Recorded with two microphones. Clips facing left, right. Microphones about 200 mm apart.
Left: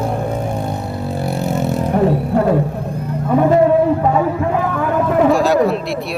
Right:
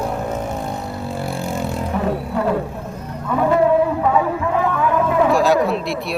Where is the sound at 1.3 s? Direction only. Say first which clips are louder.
Left 6 dB; 20° left (ahead or behind).